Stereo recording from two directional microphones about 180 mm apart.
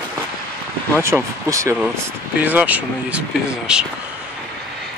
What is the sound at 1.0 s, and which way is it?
Speech, 15° right (ahead or behind).